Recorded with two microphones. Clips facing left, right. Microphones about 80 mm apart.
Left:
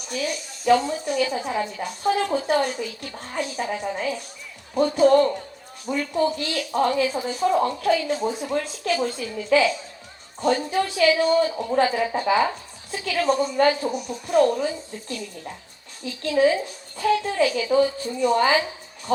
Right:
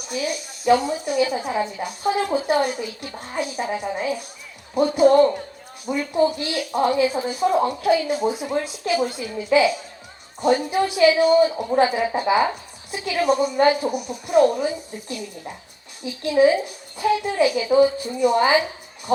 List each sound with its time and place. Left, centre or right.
0.1 s a woman's voice: centre